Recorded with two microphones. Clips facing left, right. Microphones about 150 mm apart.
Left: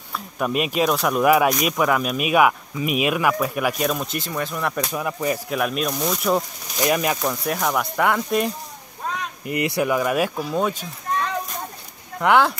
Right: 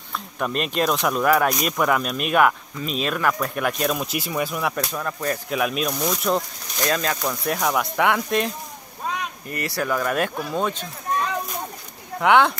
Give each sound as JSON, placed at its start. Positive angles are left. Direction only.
{"t": 0.1, "sound": "speech", "side_deg": 5}
{"t": 4.9, "sound": "speech", "side_deg": 10}
{"t": 6.8, "sound": "speech", "side_deg": 15}
{"t": 7.2, "sound": "speech", "side_deg": 5}
{"t": 9.5, "sound": "speech", "side_deg": 15}
{"t": 12.2, "sound": "speech", "side_deg": 0}